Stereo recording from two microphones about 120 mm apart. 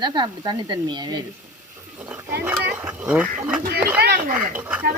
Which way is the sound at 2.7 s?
10° right (ahead or behind).